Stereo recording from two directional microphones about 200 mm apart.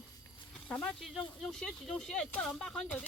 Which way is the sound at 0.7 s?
5° left (ahead or behind).